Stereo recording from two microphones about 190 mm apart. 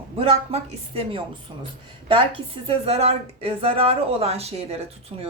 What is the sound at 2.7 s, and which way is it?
A woman's voice, 30° right (ahead or behind).